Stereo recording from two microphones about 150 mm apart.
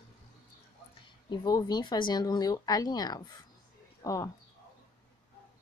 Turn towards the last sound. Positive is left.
turn(degrees=20)  # may be behind; listen again after turning